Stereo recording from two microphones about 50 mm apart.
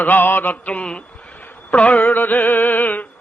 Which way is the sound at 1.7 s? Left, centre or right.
Left.